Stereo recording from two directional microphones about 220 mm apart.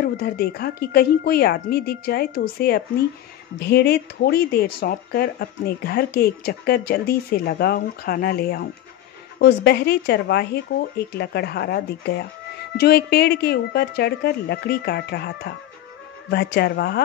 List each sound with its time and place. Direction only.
0.0 s speech: 45° left (ahead or behind)